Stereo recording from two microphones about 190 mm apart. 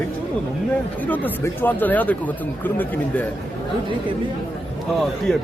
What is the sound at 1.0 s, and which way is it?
Speech, 10° left (ahead or behind).